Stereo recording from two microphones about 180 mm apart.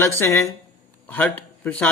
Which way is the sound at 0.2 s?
15° left (ahead or behind).